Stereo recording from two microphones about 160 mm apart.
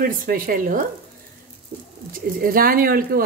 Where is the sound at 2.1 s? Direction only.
65° right (ahead or behind).